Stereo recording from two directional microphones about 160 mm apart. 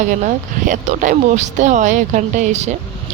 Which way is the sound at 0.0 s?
50° right (ahead or behind).